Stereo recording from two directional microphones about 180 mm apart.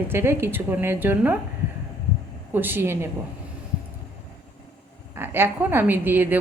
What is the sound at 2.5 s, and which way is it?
Speech, 10° right (ahead or behind).